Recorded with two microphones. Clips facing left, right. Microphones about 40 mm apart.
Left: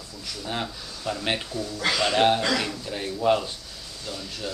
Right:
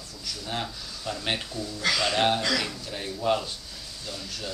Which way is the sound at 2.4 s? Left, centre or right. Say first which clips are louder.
Left 2 dB; left.